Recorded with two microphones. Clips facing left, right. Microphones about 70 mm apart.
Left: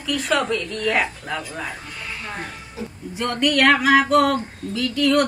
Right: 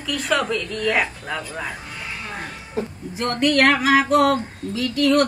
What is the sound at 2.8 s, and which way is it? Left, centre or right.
Speech, right.